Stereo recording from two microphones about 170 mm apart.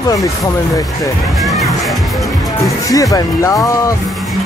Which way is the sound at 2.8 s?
20° left (ahead or behind).